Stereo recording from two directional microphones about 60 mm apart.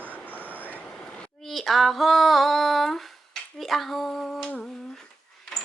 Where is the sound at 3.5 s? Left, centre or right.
Centre.